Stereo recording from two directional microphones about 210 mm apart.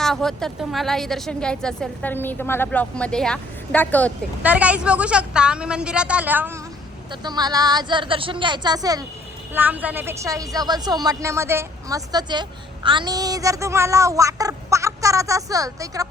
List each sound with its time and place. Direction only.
0.0 s speech: centre (ahead or behind)
4.4 s speech: 5° right (ahead or behind)
7.1 s a woman's voice: 20° right (ahead or behind)